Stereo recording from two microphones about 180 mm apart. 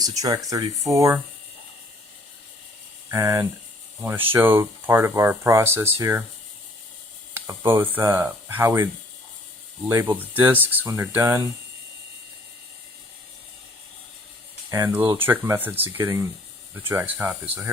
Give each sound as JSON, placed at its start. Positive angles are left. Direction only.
{"t": 0.0, "sound": "speech", "side_deg": -20}
{"t": 3.1, "sound": "speech", "side_deg": -15}
{"t": 7.3, "sound": "speech", "side_deg": -10}
{"t": 14.7, "sound": "speech", "side_deg": -15}